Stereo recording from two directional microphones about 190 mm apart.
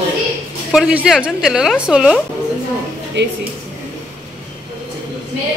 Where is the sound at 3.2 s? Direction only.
70° right (ahead or behind).